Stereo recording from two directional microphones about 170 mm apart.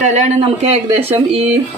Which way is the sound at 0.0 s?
45° right (ahead or behind).